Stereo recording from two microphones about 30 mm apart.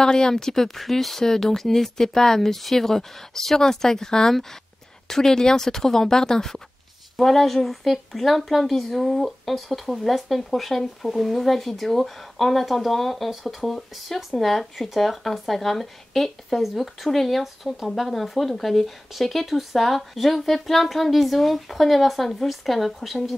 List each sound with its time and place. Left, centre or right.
0.0 s speech: left
7.2 s speech: centre